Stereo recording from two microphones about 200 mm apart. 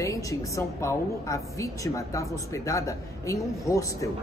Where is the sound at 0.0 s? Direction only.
15° left (ahead or behind).